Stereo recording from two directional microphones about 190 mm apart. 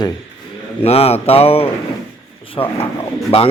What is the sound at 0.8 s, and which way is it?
A man's voice, 30° left (ahead or behind).